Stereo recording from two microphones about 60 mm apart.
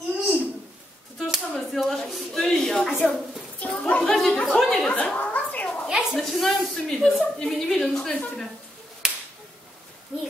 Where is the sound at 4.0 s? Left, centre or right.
Centre.